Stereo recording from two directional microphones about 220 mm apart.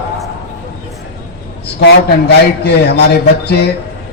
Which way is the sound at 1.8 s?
50° left (ahead or behind).